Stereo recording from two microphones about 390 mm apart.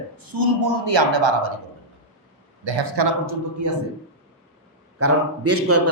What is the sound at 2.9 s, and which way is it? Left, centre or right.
Speech, right.